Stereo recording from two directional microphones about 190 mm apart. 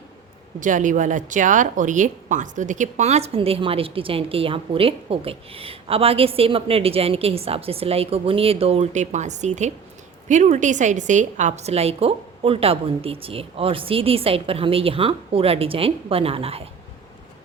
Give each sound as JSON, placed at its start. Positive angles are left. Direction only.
{"t": 0.6, "sound": "speech", "side_deg": -40}